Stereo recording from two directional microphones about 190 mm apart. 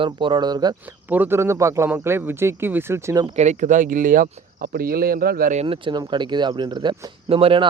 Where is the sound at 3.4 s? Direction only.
40° right (ahead or behind).